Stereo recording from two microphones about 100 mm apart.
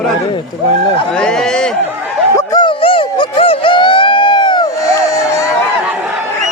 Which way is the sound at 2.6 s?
60° left (ahead or behind).